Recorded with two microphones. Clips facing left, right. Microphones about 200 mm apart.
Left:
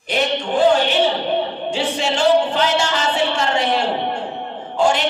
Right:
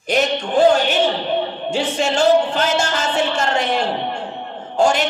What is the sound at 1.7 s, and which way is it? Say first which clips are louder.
A woman's voice: right 3 dB; 45° right (ahead or behind).